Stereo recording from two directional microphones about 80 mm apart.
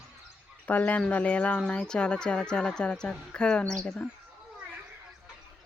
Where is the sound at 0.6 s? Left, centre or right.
Centre.